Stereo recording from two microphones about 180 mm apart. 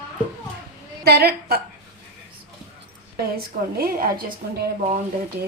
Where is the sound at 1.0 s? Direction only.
60° right (ahead or behind).